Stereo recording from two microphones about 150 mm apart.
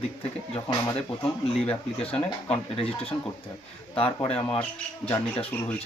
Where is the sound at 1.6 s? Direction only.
40° left (ahead or behind).